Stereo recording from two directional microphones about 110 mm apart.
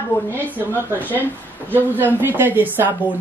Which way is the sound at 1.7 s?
20° right (ahead or behind).